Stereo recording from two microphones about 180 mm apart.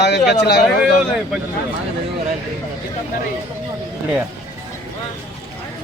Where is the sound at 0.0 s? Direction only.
65° left (ahead or behind).